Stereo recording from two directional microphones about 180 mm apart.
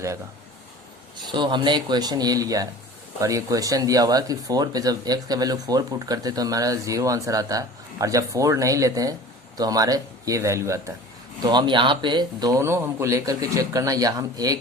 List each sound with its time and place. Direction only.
1.1 s speech: 25° right (ahead or behind)